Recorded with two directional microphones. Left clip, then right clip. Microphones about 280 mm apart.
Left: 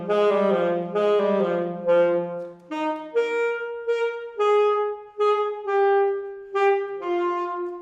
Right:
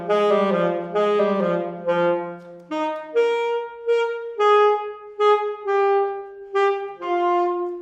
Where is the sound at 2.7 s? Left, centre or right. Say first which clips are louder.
Right 3 dB; centre.